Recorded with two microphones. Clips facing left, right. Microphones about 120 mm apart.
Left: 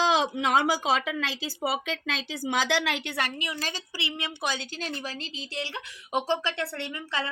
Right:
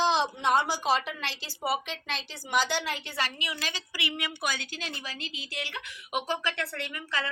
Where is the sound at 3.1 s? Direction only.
45° left (ahead or behind).